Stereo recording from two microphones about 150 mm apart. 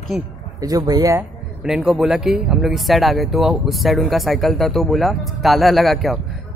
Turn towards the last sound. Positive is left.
turn(degrees=0)  # may be behind; listen again after turning